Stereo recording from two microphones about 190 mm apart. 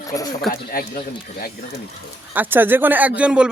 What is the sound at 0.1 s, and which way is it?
Speech, 20° left (ahead or behind).